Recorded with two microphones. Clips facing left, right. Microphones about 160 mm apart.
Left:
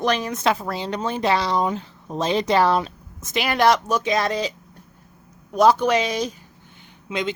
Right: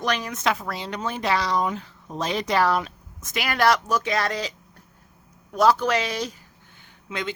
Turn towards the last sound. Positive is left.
turn(degrees=20)  # may be behind; listen again after turning